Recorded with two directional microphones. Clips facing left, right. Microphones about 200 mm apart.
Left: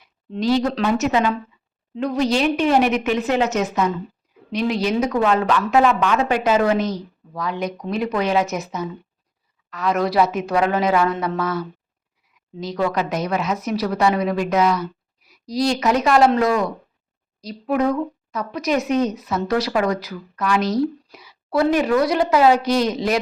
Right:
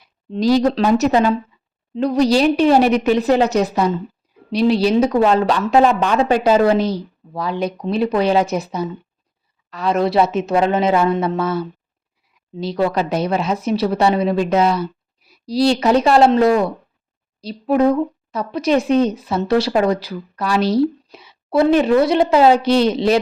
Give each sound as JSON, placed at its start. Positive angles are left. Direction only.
{"t": 0.0, "sound": "speech", "side_deg": -35}